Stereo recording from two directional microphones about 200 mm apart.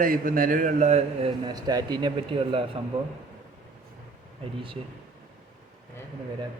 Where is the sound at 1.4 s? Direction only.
20° right (ahead or behind).